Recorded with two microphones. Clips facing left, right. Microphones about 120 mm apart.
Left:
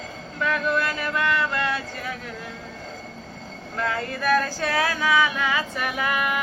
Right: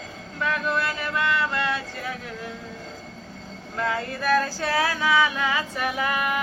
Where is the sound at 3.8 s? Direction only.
25° right (ahead or behind).